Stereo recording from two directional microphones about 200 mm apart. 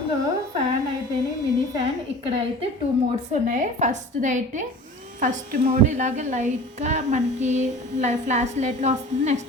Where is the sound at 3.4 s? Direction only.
35° right (ahead or behind).